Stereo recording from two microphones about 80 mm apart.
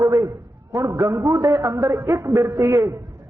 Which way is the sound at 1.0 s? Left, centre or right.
Right.